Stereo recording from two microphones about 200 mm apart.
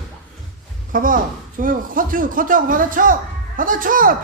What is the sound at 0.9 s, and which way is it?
Speech, 45° right (ahead or behind).